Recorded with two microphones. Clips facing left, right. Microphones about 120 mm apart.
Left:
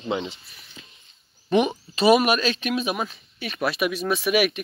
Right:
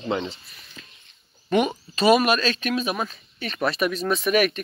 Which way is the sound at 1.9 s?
10° left (ahead or behind).